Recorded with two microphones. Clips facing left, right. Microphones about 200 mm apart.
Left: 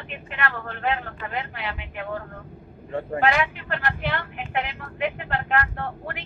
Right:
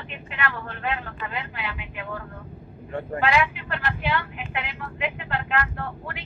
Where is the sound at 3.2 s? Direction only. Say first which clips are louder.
Even; 50° left (ahead or behind).